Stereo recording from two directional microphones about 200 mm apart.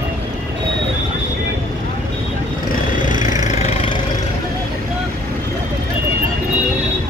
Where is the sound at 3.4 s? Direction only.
30° left (ahead or behind).